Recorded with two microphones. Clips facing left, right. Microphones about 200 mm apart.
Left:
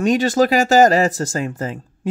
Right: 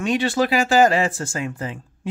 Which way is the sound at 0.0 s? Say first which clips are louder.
Left 5 dB; 40° left (ahead or behind).